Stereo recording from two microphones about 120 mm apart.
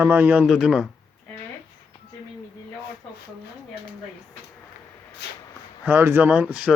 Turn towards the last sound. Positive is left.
turn(degrees=-10)  # may be behind; listen again after turning